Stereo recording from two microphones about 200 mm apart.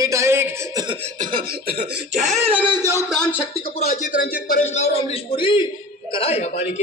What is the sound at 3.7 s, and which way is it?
Speech, 35° left (ahead or behind).